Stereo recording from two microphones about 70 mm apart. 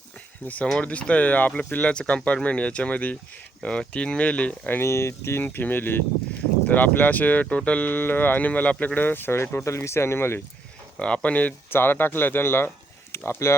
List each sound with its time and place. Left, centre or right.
0.4 s speech: left
4.8 s speech: left
5.4 s speech: left
9.6 s speech: left
11.0 s speech: centre
11.7 s speech: left